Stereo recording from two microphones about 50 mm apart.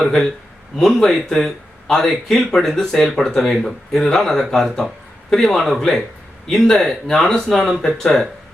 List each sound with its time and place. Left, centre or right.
0.0 s speech: centre